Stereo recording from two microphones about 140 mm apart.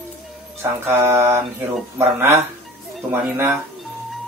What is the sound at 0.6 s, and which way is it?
Speech, 20° right (ahead or behind).